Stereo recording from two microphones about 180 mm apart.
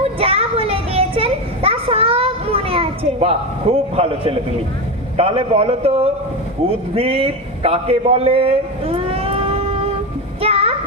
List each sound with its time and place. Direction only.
0.0 s children playing: 30° right (ahead or behind)
5.1 s a man's voice: 30° right (ahead or behind)
10.4 s a sound: 30° right (ahead or behind)